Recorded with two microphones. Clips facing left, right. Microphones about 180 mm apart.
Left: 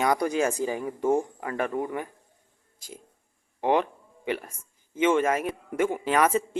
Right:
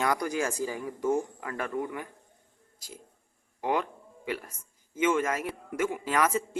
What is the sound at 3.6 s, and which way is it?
Speech, 25° left (ahead or behind).